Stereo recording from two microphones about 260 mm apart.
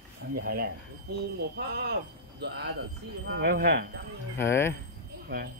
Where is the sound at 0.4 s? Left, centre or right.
Right.